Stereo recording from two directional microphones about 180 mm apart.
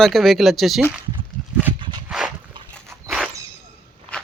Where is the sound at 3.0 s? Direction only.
5° right (ahead or behind).